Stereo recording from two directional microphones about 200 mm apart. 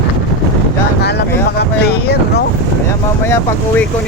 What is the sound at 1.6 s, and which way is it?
Vehicle, 55° left (ahead or behind).